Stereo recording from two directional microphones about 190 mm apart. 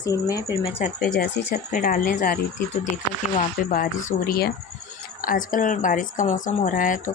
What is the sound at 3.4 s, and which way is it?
A woman's voice, 45° left (ahead or behind).